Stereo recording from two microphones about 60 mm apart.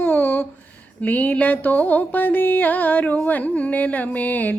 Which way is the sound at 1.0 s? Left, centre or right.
Left.